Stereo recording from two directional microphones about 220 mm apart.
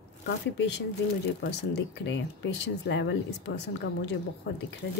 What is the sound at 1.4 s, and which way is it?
A woman's voice, 50° left (ahead or behind).